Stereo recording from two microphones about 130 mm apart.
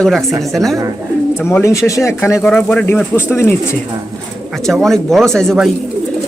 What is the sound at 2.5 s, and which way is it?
Speech, 5° left (ahead or behind).